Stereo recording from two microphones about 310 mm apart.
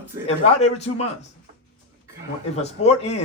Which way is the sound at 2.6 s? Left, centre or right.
Left.